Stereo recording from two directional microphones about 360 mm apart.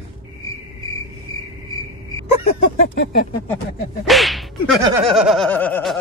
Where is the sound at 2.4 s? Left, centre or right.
Left.